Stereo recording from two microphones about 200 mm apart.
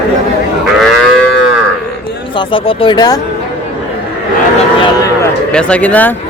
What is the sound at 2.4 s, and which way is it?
Speech, 25° left (ahead or behind).